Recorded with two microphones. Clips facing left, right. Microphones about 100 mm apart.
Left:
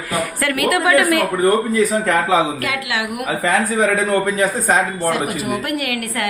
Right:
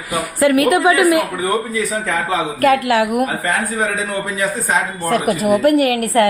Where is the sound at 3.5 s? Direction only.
85° left.